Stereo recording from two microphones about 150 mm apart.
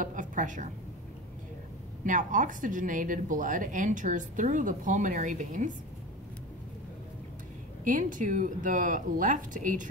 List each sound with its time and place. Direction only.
0.0 s a sound: 60° right (ahead or behind)
2.0 s a woman's voice: 60° right (ahead or behind)
7.8 s a woman's voice: 60° right (ahead or behind)